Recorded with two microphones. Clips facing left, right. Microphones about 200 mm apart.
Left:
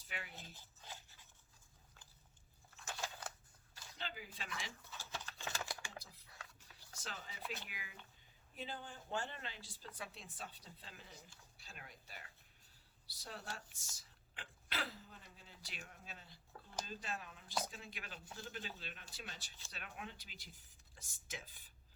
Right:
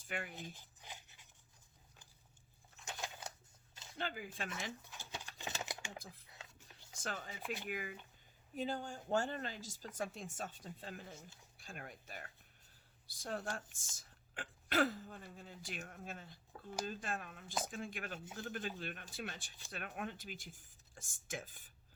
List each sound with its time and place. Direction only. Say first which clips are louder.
0.1 s speech: right 7 dB; 50° right (ahead or behind)
0.3 s a sound: right 6 dB; 15° right (ahead or behind)
2.7 s a sound: even; 20° right (ahead or behind)
3.9 s speech: right 7 dB; 50° right (ahead or behind)
4.9 s a sound: even; 15° right (ahead or behind)
6.2 s music: right 1 dB; 20° right (ahead or behind)
7.0 s speech: right 7 dB; 50° right (ahead or behind)
7.4 s speech: right 3 dB; 15° right (ahead or behind)
7.7 s speech: right 13 dB; 50° right (ahead or behind)